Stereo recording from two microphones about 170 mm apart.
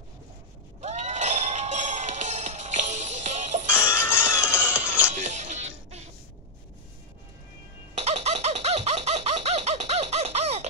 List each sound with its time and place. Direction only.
0.7 s music: 40° right (ahead or behind)
3.8 s music: 15° left (ahead or behind)
4.7 s music: 10° right (ahead or behind)
5.1 s music: 45° right (ahead or behind)
7.9 s chicken: 40° right (ahead or behind)